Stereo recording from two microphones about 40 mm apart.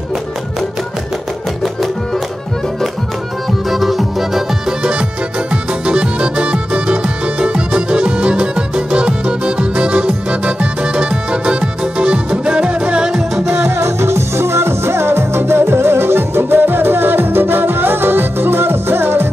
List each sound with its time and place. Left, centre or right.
3.7 s music: centre
5.5 s music: right
13.5 s music: right